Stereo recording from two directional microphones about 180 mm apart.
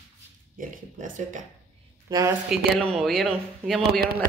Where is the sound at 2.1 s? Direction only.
25° right (ahead or behind).